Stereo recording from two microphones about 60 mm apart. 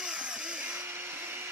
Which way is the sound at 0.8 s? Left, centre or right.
Right.